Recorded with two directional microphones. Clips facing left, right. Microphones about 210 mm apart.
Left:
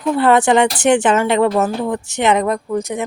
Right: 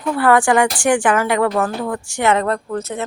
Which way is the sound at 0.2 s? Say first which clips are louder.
Left 1 dB; 20° left (ahead or behind).